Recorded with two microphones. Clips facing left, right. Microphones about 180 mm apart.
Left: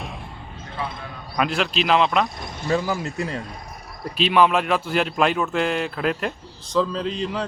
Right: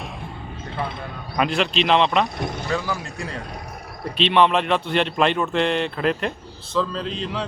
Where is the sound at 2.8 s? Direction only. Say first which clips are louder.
Left 3 dB; 15° left (ahead or behind).